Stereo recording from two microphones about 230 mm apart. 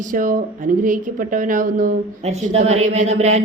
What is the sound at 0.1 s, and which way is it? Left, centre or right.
Speech, right.